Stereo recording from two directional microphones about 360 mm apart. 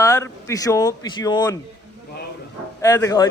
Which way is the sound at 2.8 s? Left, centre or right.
Centre.